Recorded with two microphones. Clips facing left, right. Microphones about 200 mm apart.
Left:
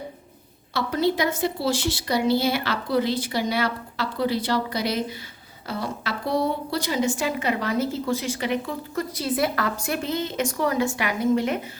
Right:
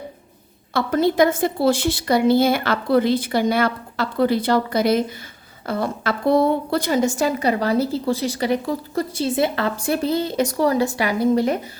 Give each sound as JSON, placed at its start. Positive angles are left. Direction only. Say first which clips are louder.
{"t": 0.7, "sound": "a woman's voice", "louder": "right 4 dB", "side_deg": -50}